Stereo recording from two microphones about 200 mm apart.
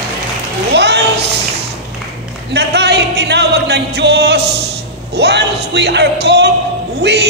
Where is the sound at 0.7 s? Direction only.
55° right (ahead or behind).